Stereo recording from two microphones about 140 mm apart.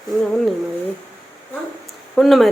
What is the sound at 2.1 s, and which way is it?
Speech, centre (ahead or behind).